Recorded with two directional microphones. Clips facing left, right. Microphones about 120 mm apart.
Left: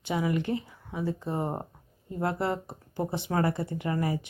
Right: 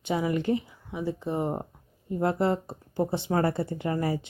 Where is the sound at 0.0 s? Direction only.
25° right (ahead or behind).